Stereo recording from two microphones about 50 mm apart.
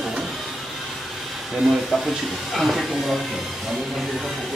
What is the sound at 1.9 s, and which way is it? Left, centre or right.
Speech, centre.